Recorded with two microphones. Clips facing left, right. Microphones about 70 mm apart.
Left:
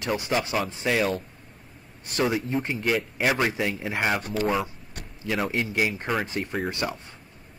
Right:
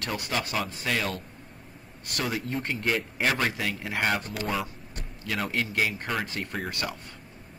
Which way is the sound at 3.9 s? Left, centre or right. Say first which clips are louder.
Left 2 dB; centre.